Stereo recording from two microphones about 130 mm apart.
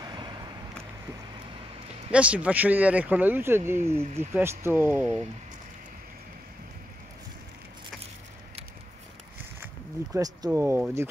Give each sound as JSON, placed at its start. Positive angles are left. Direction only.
{"t": 0.0, "sound": "vehicle", "side_deg": -35}
{"t": 2.0, "sound": "speech", "side_deg": -10}
{"t": 10.1, "sound": "speech", "side_deg": -25}